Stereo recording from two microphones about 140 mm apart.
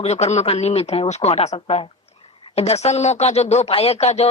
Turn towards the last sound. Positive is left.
turn(degrees=50)  # may be behind; listen again after turning